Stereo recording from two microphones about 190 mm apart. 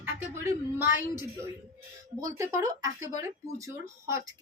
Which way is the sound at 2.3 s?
15° right (ahead or behind).